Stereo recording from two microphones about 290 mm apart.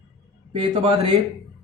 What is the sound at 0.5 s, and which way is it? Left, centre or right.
Speech, centre.